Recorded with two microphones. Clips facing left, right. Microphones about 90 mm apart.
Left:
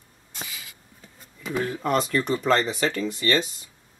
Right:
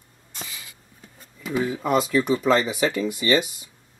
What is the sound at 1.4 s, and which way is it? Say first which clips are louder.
Speech: right 2 dB; 5° right (ahead or behind).